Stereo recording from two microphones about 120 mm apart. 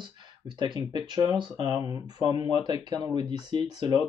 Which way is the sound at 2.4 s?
35° right (ahead or behind).